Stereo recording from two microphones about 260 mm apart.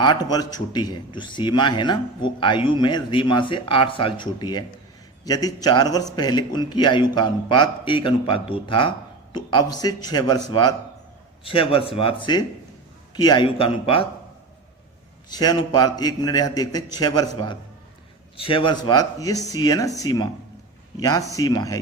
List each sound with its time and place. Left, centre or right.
0.0 s a man's voice: centre
15.3 s a man's voice: centre